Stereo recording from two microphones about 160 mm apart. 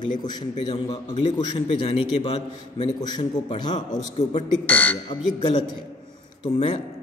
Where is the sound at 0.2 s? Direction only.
25° left (ahead or behind).